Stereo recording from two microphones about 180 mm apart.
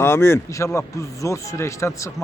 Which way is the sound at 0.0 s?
15° left (ahead or behind).